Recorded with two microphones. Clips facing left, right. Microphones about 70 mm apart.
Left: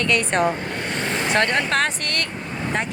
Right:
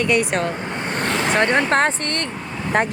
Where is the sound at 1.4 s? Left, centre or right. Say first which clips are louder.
Right 4 dB; right.